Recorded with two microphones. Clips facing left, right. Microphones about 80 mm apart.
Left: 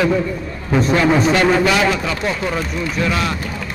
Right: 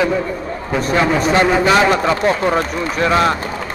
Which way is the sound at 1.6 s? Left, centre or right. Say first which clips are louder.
Right 3 dB; right.